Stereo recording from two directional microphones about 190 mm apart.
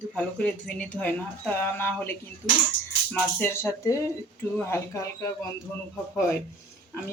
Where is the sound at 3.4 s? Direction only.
15° left (ahead or behind).